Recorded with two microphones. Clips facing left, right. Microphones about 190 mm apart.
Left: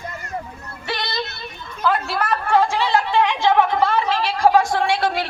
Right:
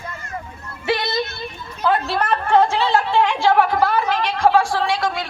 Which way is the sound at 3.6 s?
5° right (ahead or behind).